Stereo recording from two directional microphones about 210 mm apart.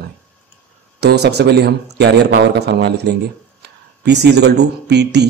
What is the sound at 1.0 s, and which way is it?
A man's voice, 50° right (ahead or behind).